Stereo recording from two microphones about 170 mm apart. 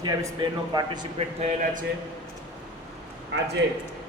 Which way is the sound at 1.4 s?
45° right (ahead or behind).